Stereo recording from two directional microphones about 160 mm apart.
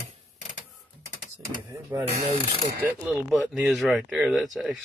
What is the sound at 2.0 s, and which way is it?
Speech, 40° right (ahead or behind).